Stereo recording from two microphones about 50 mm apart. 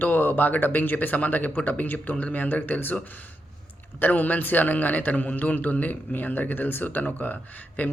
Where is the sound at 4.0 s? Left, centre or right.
Left.